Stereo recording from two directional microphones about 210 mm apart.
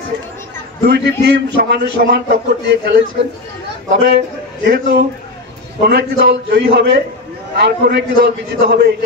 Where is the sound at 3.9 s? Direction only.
55° right (ahead or behind).